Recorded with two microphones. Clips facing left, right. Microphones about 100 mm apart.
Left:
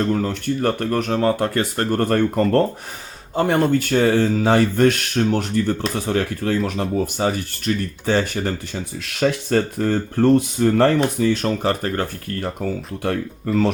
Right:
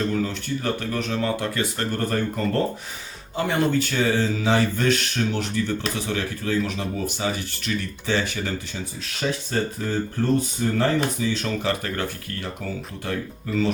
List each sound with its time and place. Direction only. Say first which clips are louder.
0.0 s speech: left 4 dB; 50° left (ahead or behind)
3.3 s speech: left 5 dB; 45° left (ahead or behind)
13.0 s speech: left 6 dB; 60° left (ahead or behind)